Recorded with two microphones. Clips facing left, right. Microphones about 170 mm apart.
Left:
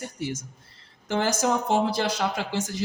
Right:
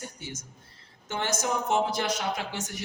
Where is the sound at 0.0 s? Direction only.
90° left.